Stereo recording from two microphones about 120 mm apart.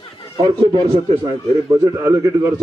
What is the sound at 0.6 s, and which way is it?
Speech, 50° right (ahead or behind).